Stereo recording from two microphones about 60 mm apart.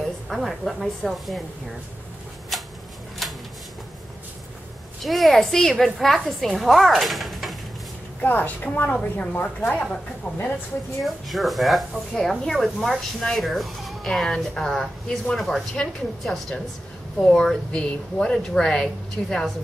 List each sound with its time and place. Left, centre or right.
0.0 s a woman's voice: centre
2.5 s a sound: centre
5.0 s speech: centre
8.2 s a woman's voice: left
11.2 s speech: centre